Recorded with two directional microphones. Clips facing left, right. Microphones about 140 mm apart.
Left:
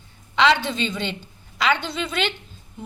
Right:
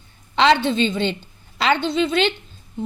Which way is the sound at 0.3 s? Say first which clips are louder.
Right 3 dB; 30° right (ahead or behind).